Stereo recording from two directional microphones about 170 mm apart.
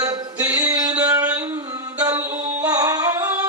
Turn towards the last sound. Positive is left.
turn(degrees=-20)  # may be behind; listen again after turning